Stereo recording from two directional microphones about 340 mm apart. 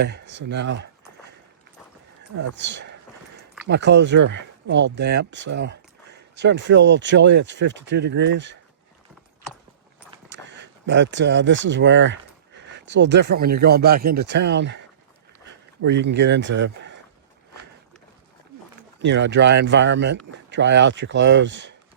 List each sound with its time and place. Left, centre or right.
0.0 s speech: right
2.6 s speech: right
10.2 s speech: right
15.8 s speech: right
18.8 s speech: right